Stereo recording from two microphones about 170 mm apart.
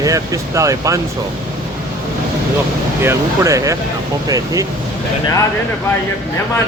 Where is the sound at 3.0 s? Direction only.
15° right (ahead or behind).